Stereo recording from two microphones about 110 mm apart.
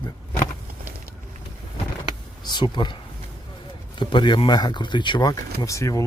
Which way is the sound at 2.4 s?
40° left (ahead or behind).